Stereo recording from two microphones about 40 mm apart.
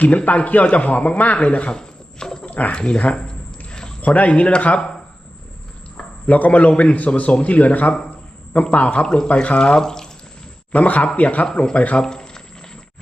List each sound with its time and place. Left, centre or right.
0.3 s a man's voice: left
1.7 s a sound: centre
2.5 s speech: left
2.7 s speech: left
3.7 s squish: centre
4.0 s a man's voice: left
6.0 s a man's voice: left
9.6 s speech: centre
10.7 s a man's voice: left
12.0 s a sound: centre